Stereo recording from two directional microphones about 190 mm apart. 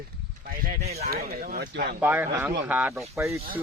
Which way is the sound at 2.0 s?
10° right (ahead or behind).